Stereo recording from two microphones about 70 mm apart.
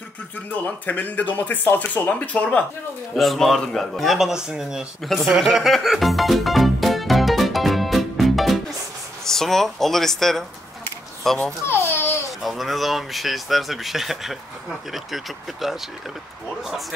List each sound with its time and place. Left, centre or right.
0.5 s speech: left
3.2 s speech: centre
11.6 s babbling: left
12.4 s speech: centre